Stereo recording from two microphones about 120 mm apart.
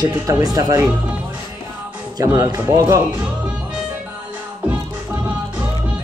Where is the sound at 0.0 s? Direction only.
30° right (ahead or behind).